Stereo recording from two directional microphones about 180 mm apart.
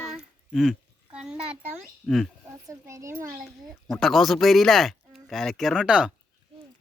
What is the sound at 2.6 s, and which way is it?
Speech, 15° right (ahead or behind).